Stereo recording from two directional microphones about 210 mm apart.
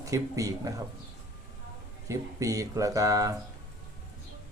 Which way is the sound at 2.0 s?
15° right (ahead or behind).